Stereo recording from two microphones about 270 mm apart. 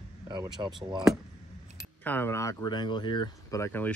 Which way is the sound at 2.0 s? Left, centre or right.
Centre.